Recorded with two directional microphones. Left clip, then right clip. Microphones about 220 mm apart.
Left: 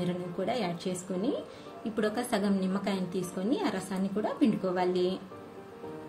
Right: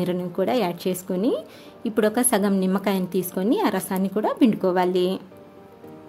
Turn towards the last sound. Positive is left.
turn(degrees=-50)  # may be behind; listen again after turning